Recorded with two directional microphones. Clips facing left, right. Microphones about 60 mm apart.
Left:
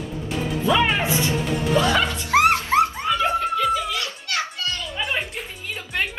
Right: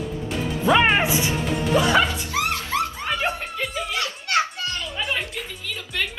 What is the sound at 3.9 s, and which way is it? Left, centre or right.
Children playing, right.